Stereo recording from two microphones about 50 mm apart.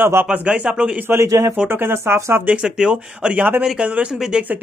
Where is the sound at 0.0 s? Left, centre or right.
Right.